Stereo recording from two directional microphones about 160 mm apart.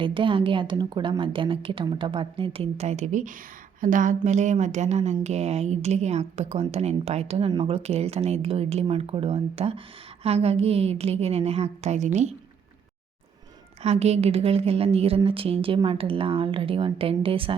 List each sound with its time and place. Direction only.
0.0 s a woman's voice: 30° right (ahead or behind)
13.8 s a woman's voice: 40° right (ahead or behind)